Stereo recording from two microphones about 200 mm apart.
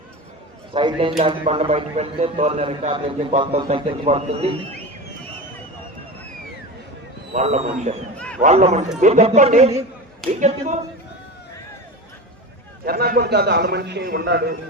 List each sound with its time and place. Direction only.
0.7 s a man's voice: 25° right (ahead or behind)
7.3 s speech: 35° right (ahead or behind)
12.8 s a man's voice: 50° right (ahead or behind)